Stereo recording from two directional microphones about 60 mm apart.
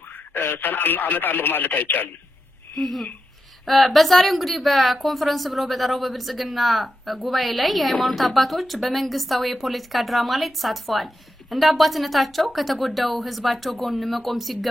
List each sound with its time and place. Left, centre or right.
0.1 s speech: left
2.8 s a woman's voice: centre